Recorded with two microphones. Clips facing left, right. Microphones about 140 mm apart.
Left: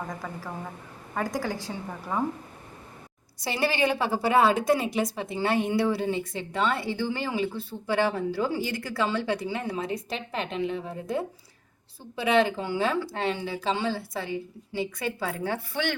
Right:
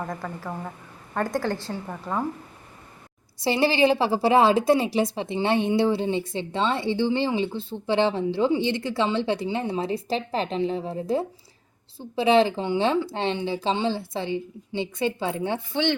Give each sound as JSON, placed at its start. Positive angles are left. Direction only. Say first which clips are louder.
{"t": 0.2, "sound": "a woman's voice", "louder": "right 3 dB", "side_deg": 5}
{"t": 1.9, "sound": "a woman's voice", "louder": "right 1 dB", "side_deg": 0}
{"t": 3.4, "sound": "a woman's voice", "louder": "right 6 dB", "side_deg": -25}